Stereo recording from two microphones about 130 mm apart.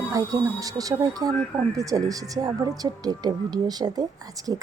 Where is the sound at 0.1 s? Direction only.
25° right (ahead or behind).